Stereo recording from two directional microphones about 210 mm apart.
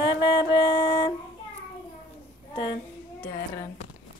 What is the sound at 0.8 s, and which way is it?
Child singing, 20° left (ahead or behind).